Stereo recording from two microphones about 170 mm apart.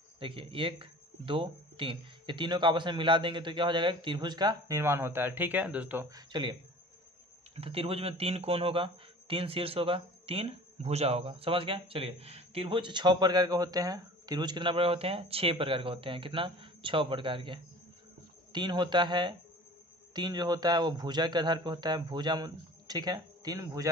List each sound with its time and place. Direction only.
0.2 s speech: 30° right (ahead or behind)
7.5 s speech: 35° right (ahead or behind)